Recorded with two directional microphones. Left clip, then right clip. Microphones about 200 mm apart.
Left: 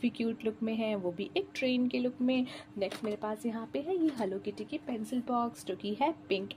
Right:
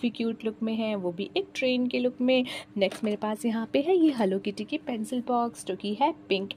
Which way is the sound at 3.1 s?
50° right (ahead or behind).